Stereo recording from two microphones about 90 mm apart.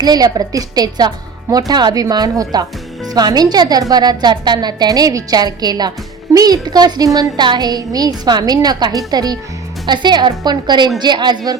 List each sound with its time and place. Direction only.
0.0 s speech: 45° right (ahead or behind)